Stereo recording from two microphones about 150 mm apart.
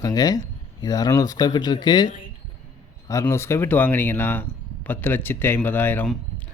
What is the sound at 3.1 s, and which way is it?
Speech, 20° left (ahead or behind).